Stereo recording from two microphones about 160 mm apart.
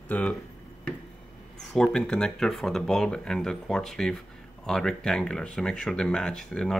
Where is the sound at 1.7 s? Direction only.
5° left (ahead or behind).